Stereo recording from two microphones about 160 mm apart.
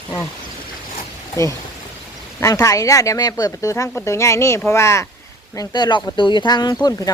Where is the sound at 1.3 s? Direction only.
20° left (ahead or behind).